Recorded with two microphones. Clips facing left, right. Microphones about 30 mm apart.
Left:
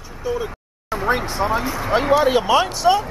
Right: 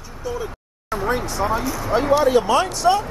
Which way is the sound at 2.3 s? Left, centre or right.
Centre.